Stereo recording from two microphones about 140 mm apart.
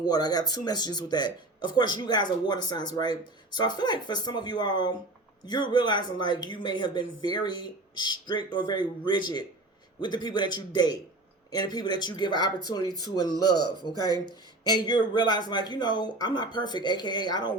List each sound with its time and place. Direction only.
0.0 s speech: 30° left (ahead or behind)